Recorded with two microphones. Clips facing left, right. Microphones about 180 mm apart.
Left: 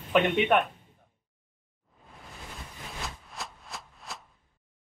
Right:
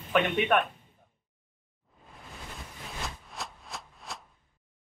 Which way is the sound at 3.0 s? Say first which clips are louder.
Right 1 dB; centre (ahead or behind).